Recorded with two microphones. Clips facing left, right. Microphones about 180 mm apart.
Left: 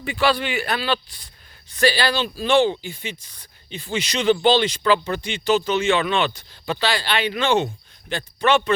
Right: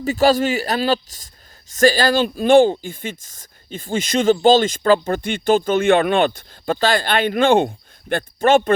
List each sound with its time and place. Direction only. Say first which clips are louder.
0.0 s a man's voice: right 6 dB; 40° right (ahead or behind)